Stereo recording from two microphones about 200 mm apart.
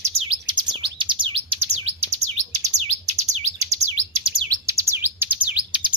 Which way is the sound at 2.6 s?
35° right (ahead or behind).